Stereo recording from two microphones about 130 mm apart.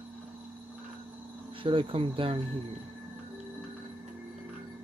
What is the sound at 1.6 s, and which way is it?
Speech, 40° right (ahead or behind).